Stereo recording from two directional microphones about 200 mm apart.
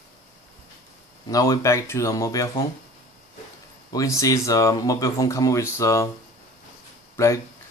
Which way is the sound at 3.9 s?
15° left (ahead or behind).